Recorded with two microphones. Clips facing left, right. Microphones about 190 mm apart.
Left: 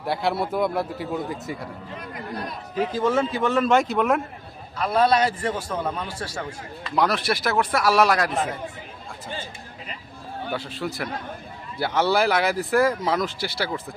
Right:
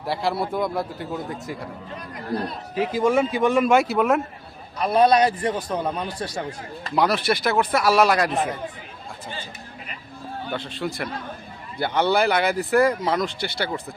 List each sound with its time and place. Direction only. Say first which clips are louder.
0.0 s speech: even; centre (ahead or behind)
2.3 s speech: right 7 dB; 30° right (ahead or behind)
2.7 s a man's voice: right 2 dB; 10° right (ahead or behind)
4.8 s a man's voice: right 3 dB; 20° right (ahead or behind)
6.9 s speech: right 2 dB; centre (ahead or behind)
10.5 s speech: right 1 dB; 5° left (ahead or behind)